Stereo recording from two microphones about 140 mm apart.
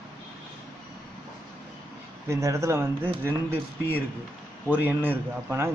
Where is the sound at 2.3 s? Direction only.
20° right (ahead or behind).